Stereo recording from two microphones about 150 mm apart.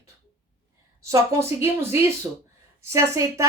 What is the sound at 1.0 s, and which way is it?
Speech, 20° right (ahead or behind).